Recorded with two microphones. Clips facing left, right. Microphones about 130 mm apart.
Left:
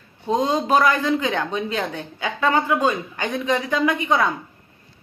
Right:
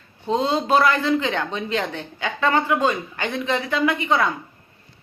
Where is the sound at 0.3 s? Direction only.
15° left (ahead or behind).